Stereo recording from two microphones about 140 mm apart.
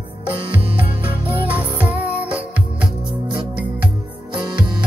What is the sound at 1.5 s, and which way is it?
Music, 10° right (ahead or behind).